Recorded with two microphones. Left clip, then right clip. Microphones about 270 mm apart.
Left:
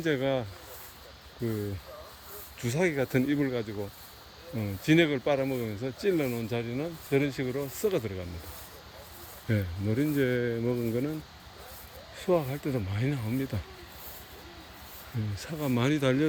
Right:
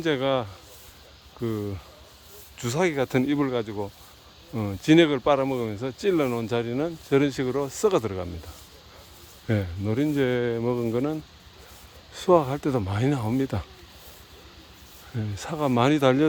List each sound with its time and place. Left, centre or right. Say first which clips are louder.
0.0 s speech: right 4 dB; centre
2.6 s speech: right 4 dB; centre
9.5 s speech: right 4 dB; centre
12.1 s speech: right 8 dB; centre
15.4 s speech: right 8 dB; centre